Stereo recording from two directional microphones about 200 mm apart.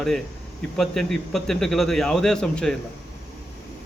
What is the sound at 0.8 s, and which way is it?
Speech, centre (ahead or behind).